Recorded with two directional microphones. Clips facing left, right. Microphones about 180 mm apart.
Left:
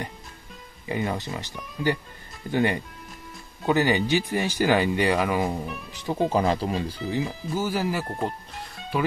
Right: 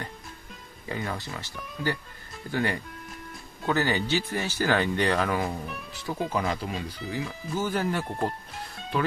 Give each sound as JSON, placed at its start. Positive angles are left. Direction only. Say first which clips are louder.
{"t": 0.8, "sound": "speech", "louder": "left 5 dB", "side_deg": 20}
{"t": 6.3, "sound": "speech", "louder": "left 6 dB", "side_deg": 35}
{"t": 7.5, "sound": "speech", "louder": "left 1 dB", "side_deg": 5}